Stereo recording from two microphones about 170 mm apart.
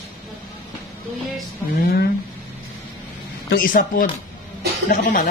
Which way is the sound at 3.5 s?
55° left (ahead or behind).